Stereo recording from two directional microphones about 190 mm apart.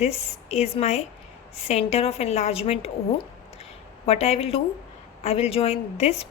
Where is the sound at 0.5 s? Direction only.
35° left (ahead or behind).